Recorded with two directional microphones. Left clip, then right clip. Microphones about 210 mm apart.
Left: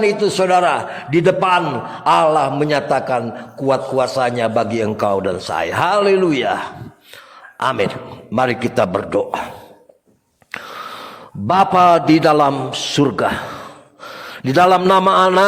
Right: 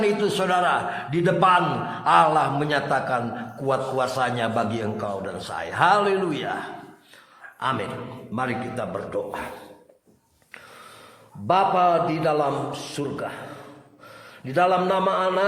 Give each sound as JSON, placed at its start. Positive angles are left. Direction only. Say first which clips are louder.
{"t": 0.0, "sound": "a man's voice", "louder": "left 7 dB", "side_deg": 25}
{"t": 7.6, "sound": "a man's voice", "louder": "left 8 dB", "side_deg": 45}
{"t": 11.4, "sound": "a man's voice", "louder": "left 7 dB", "side_deg": 50}